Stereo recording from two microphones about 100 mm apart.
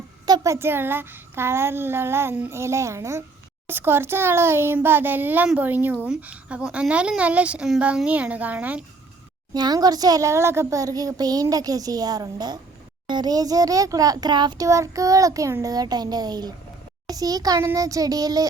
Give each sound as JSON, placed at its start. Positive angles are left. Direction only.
{"t": 0.3, "sound": "a child's voice", "side_deg": -35}
{"t": 9.5, "sound": "a child's voice", "side_deg": -45}
{"t": 14.7, "sound": "a child's voice", "side_deg": -30}